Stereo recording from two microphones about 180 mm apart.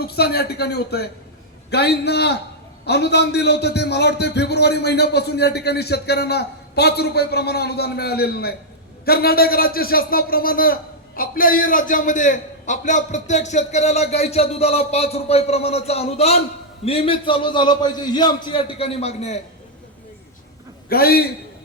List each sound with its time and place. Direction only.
0.0 s a man's voice: 60° left (ahead or behind); by 19.4 s 35° left (ahead or behind)
20.9 s a man's voice: 60° left (ahead or behind)